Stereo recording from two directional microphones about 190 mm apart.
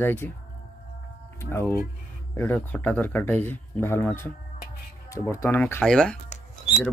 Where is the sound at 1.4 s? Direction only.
10° left (ahead or behind).